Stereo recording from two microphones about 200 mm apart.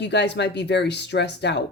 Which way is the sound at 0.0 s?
60° left (ahead or behind).